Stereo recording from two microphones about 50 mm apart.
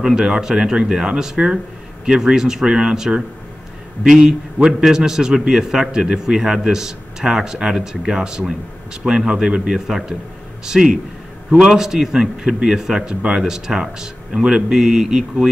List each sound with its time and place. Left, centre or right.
0.0 s a man's voice: centre